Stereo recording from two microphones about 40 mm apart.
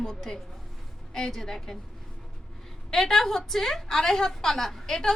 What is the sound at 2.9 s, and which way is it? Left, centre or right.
A woman's voice, centre.